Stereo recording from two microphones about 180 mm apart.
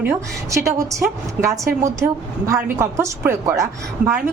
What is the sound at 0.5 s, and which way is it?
A woman's voice, 15° right (ahead or behind).